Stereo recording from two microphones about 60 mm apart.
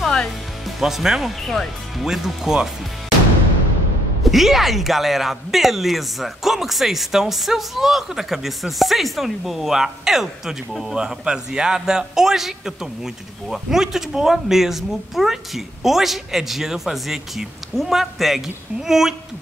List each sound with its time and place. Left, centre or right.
0.0 s music: centre
0.7 s a man's voice: centre
2.0 s speech: centre
4.2 s a man's voice: centre